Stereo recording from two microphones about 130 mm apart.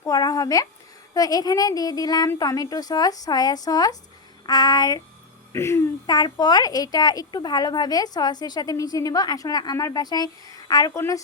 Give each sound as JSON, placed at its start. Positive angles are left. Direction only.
{"t": 0.0, "sound": "a sound", "side_deg": 30}
{"t": 1.1, "sound": "speech", "side_deg": 30}
{"t": 6.1, "sound": "speech", "side_deg": 30}